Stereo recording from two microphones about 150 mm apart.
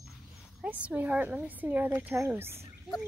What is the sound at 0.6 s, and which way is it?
Speech, 10° right (ahead or behind).